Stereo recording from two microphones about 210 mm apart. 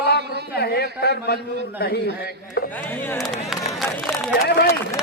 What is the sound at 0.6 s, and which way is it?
A man's voice, 50° left (ahead or behind).